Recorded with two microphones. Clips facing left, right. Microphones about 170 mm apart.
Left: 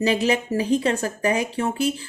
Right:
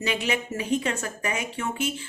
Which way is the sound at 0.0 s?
35° left (ahead or behind).